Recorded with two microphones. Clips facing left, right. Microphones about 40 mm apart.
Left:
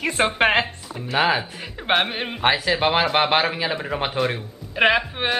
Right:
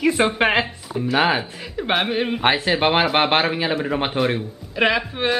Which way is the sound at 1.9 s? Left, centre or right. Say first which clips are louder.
Right 1 dB; centre.